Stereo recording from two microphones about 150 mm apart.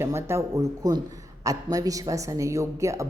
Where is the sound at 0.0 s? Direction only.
15° right (ahead or behind).